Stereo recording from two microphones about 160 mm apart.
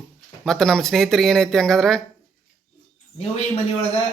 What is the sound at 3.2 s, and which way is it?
Speech, 40° left (ahead or behind).